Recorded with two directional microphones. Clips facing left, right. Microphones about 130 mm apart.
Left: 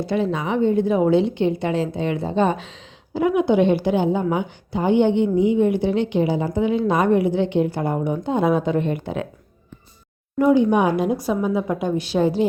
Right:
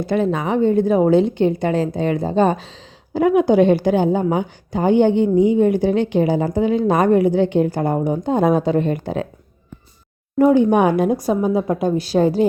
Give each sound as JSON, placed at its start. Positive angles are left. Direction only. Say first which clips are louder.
{"t": 0.0, "sound": "a woman's voice", "louder": "right 3 dB", "side_deg": -50}
{"t": 10.3, "sound": "a woman's voice", "louder": "right 3 dB", "side_deg": -50}